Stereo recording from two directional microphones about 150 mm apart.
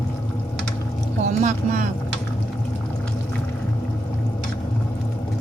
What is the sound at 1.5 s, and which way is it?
Speech, 60° right (ahead or behind).